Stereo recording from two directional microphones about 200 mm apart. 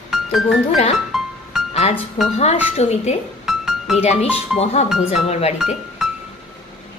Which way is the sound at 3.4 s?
Centre (ahead or behind).